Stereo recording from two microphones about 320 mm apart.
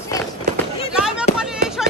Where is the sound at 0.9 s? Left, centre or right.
Centre.